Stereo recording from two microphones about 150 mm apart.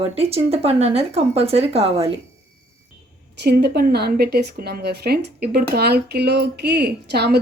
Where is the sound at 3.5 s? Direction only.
90° right.